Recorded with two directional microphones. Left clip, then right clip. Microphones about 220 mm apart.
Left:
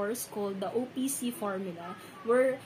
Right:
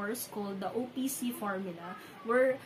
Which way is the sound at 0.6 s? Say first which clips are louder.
Even; 10° right (ahead or behind).